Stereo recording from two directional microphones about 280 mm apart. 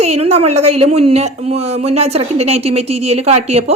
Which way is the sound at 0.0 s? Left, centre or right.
Right.